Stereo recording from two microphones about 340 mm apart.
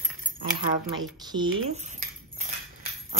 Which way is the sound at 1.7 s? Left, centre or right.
Centre.